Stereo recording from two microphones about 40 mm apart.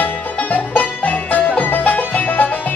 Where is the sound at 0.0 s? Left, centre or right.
Left.